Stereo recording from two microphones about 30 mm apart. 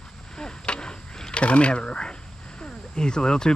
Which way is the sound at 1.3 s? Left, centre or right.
Left.